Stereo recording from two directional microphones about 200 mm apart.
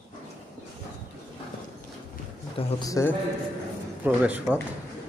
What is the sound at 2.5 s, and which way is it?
Speech, 15° left (ahead or behind).